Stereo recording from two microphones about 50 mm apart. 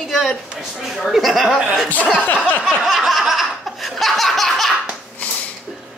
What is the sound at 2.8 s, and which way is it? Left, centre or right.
Laughter, centre.